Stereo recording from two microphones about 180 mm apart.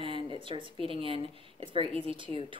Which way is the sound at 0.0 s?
30° right (ahead or behind).